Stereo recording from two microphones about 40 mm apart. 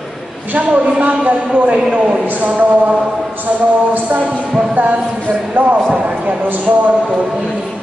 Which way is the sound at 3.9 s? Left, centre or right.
Right.